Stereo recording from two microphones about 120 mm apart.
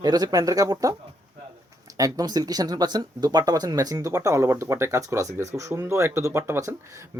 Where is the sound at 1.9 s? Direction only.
30° right (ahead or behind).